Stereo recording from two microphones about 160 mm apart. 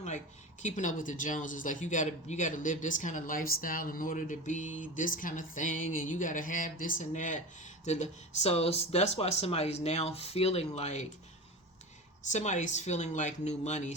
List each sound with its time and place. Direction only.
0.6 s speech: 50° left (ahead or behind)
12.3 s speech: 50° left (ahead or behind)